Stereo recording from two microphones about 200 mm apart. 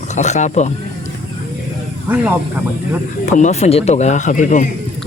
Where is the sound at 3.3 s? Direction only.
35° left (ahead or behind).